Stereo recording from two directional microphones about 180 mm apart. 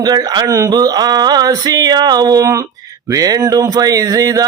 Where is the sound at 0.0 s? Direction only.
20° right (ahead or behind).